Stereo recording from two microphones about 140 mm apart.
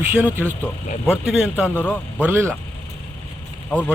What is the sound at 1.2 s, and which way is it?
Speech, centre (ahead or behind).